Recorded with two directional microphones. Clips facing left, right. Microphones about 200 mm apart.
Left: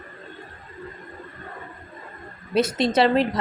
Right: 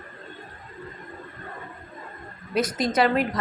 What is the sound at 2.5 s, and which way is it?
Speech, 25° left (ahead or behind).